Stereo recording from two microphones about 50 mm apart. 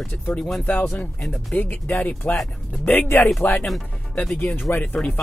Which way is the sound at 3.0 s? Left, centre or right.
Left.